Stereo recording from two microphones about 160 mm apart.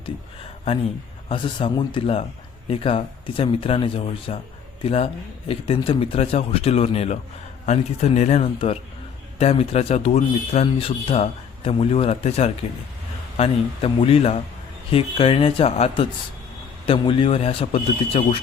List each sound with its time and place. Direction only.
1.3 s speech: 30° left (ahead or behind)